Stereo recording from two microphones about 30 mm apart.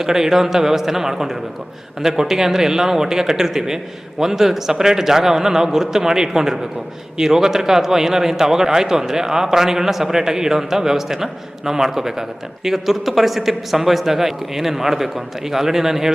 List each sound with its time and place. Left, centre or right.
0.0 s speech: centre